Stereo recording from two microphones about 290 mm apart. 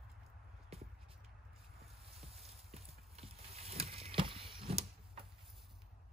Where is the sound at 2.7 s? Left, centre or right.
Right.